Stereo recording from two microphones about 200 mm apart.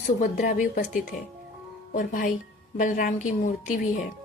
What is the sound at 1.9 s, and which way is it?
A woman's voice, 40° left (ahead or behind).